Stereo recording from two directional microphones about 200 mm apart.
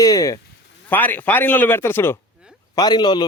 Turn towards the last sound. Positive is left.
turn(degrees=20)  # may be behind; listen again after turning